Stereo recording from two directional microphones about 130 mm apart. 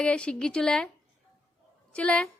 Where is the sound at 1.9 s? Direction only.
10° left (ahead or behind).